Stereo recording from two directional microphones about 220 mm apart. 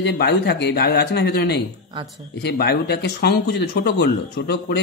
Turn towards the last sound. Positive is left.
turn(degrees=50)  # may be behind; listen again after turning